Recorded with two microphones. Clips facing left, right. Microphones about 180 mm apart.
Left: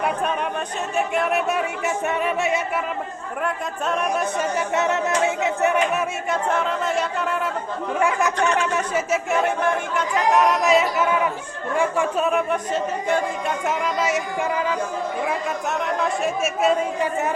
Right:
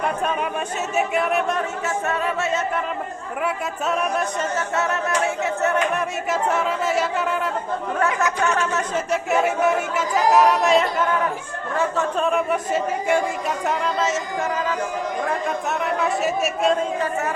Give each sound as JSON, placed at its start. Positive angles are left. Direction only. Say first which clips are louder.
{"t": 0.9, "sound": "speech", "louder": "right 1 dB", "side_deg": 0}
{"t": 2.0, "sound": "speech", "louder": "left 2 dB", "side_deg": 15}
{"t": 3.4, "sound": "speech", "louder": "right 1 dB", "side_deg": 0}
{"t": 4.4, "sound": "speech", "louder": "left 1 dB", "side_deg": 15}
{"t": 6.3, "sound": "speech", "louder": "right 1 dB", "side_deg": 0}
{"t": 7.9, "sound": "speech", "louder": "left 2 dB", "side_deg": 10}
{"t": 13.7, "sound": "speech", "louder": "even", "side_deg": 10}
{"t": 16.0, "sound": "speech", "louder": "right 1 dB", "side_deg": 0}